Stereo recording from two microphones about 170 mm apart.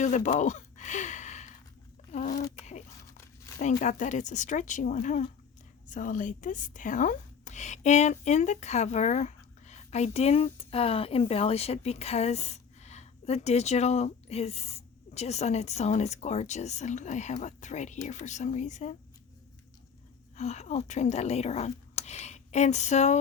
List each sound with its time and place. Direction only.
0.0 s a sound: 45° left (ahead or behind)
3.6 s speech: 45° left (ahead or behind)
20.3 s speech: 40° left (ahead or behind)